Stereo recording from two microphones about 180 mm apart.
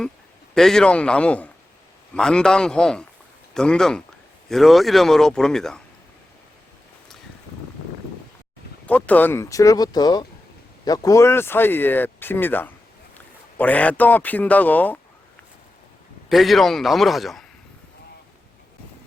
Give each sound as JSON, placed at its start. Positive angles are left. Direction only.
{"t": 0.5, "sound": "a man's voice", "side_deg": 0}
{"t": 8.9, "sound": "speech", "side_deg": 10}
{"t": 16.3, "sound": "a man's voice", "side_deg": 0}